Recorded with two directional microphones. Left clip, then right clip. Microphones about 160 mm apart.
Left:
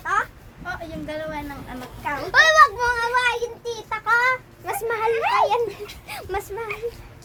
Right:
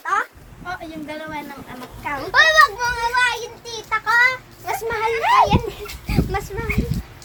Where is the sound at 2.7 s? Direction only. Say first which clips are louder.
Right 1 dB; 30° left (ahead or behind).